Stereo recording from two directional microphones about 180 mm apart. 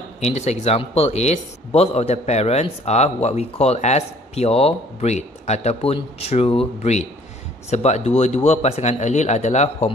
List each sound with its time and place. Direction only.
0.2 s speech: 40° left (ahead or behind)